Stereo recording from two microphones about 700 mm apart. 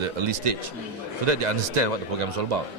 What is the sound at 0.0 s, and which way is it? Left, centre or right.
Speech, right.